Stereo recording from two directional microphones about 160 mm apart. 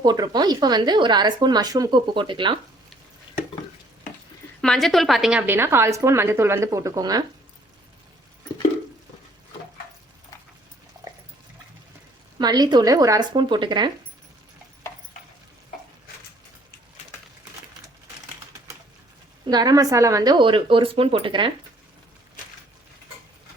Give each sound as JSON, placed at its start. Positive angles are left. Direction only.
{"t": 0.0, "sound": "speech", "side_deg": -25}
{"t": 4.6, "sound": "a woman's voice", "side_deg": 5}
{"t": 12.4, "sound": "speech", "side_deg": -25}
{"t": 19.5, "sound": "speech", "side_deg": -25}